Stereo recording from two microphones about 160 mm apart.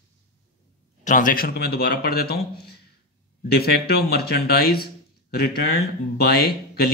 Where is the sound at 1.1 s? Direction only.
55° left (ahead or behind); by 6.5 s 75° left (ahead or behind).